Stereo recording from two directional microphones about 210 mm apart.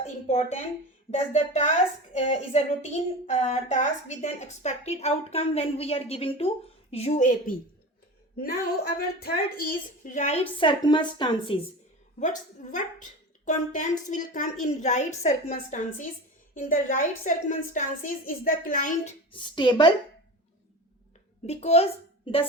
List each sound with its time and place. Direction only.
0.0 s a sound: 35° left (ahead or behind)
1.1 s a woman's voice: 30° left (ahead or behind)
12.7 s a woman's voice: 35° left (ahead or behind)
19.3 s a woman's voice: 20° left (ahead or behind)
21.4 s a woman's voice: 30° left (ahead or behind)